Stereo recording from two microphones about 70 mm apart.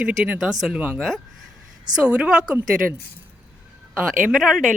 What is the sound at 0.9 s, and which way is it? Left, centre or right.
Speech, centre.